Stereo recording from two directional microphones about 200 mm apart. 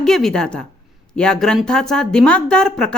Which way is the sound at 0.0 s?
Centre (ahead or behind).